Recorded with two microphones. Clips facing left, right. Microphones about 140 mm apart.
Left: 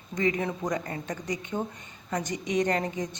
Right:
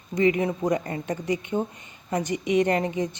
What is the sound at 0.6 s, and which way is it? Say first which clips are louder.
Speech: right 5 dB; 25° right (ahead or behind).